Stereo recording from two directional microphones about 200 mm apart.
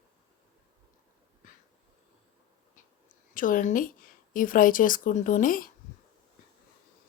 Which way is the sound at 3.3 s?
40° left (ahead or behind).